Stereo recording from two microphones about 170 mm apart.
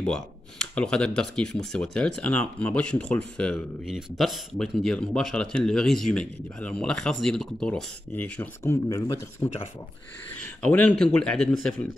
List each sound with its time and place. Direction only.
0.0 s speech: 5° left (ahead or behind)